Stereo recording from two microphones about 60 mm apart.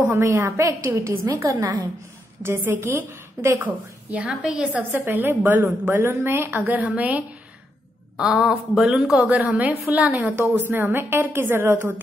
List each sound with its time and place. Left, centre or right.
0.2 s a woman's voice: right
2.4 s a woman's voice: right
3.6 s a woman's voice: right
4.9 s a woman's voice: right
6.7 s a woman's voice: right
8.5 s speech: centre
9.5 s a woman's voice: right
10.7 s a woman's voice: right